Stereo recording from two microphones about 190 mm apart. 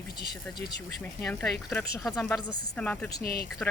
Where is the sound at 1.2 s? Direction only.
5° left (ahead or behind).